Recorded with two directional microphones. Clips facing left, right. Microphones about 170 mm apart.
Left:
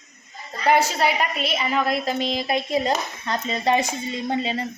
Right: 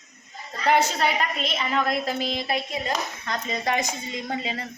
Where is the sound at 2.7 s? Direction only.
30° left (ahead or behind).